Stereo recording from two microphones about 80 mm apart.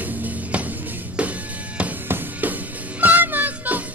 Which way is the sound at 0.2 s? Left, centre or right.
Centre.